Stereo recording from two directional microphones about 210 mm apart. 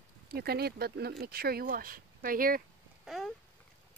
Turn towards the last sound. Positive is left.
turn(degrees=0)  # may be behind; listen again after turning